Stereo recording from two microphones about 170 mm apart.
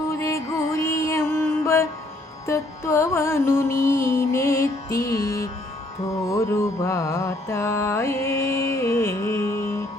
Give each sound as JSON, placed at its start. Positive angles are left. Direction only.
{"t": 0.2, "sound": "music", "side_deg": 15}
{"t": 6.2, "sound": "mantra", "side_deg": 15}